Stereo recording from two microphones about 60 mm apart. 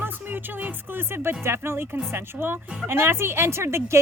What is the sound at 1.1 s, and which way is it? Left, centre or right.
Speech, right.